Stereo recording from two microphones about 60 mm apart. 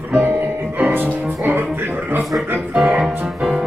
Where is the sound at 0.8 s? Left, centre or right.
Right.